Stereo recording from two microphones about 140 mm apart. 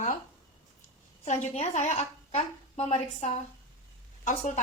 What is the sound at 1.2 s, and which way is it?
A woman's voice, 55° left (ahead or behind).